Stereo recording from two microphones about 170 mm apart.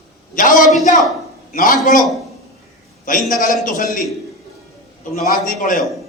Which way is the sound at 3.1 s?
50° left (ahead or behind).